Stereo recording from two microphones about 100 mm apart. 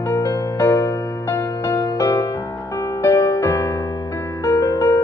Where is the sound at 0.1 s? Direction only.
30° left (ahead or behind).